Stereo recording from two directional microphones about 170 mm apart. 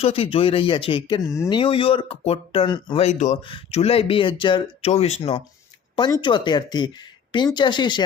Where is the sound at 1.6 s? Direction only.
30° left (ahead or behind).